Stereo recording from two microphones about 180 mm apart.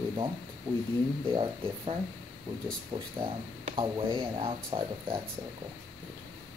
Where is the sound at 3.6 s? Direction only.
30° right (ahead or behind).